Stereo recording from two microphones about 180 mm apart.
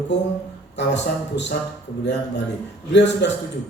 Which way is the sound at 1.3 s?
70° left (ahead or behind).